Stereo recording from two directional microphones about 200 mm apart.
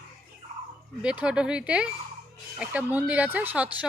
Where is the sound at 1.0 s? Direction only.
5° right (ahead or behind).